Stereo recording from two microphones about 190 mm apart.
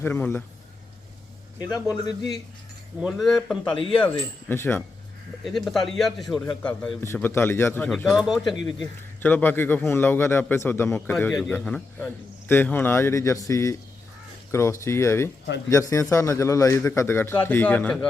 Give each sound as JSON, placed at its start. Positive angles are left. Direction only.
{"t": 0.0, "sound": "speech", "side_deg": 15}
{"t": 1.5, "sound": "speech", "side_deg": 20}
{"t": 3.0, "sound": "speech", "side_deg": 0}
{"t": 5.5, "sound": "speech", "side_deg": 0}